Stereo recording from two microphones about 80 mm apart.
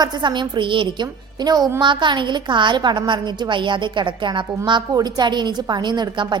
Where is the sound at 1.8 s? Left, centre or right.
Right.